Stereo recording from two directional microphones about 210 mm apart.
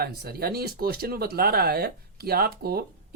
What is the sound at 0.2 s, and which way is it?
Speech, 45° right (ahead or behind).